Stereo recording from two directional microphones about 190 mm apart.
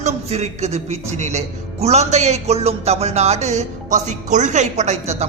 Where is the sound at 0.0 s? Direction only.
35° right (ahead or behind).